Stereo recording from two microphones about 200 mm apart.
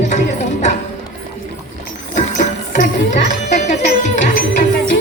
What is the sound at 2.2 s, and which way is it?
Music, 40° left (ahead or behind).